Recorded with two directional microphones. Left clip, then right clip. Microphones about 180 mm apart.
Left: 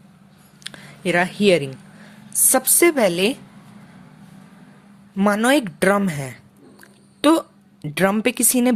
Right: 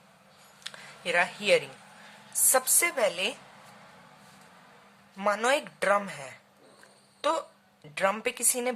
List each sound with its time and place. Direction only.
0.6 s a sound: 35° left (ahead or behind)
2.3 s a woman's voice: 35° left (ahead or behind)
5.1 s a woman's voice: 35° left (ahead or behind)